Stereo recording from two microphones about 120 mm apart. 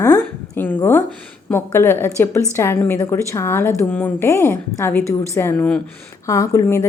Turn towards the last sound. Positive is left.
turn(degrees=25)  # may be behind; listen again after turning